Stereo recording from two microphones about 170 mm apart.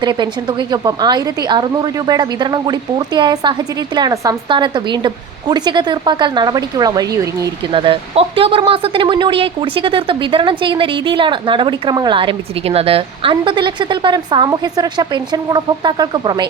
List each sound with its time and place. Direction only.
0.0 s speech: 25° right (ahead or behind)
7.8 s speech: 30° right (ahead or behind)